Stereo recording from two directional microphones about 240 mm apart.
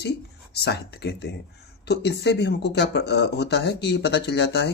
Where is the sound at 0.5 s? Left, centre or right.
Left.